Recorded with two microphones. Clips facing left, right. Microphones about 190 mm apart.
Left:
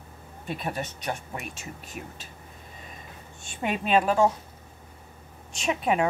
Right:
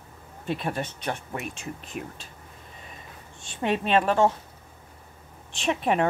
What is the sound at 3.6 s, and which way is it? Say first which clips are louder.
Speech: right 1 dB; 5° left (ahead or behind).